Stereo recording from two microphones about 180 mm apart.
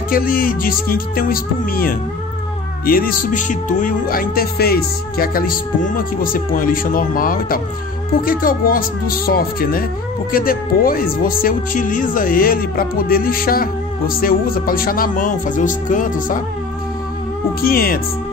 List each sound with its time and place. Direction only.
0.1 s speech: 55° left (ahead or behind)
17.6 s speech: 55° left (ahead or behind)